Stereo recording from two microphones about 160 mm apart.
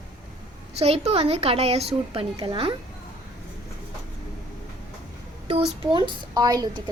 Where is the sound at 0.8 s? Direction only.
40° right (ahead or behind).